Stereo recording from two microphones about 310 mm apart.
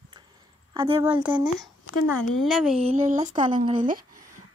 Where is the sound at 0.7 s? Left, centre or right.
Centre.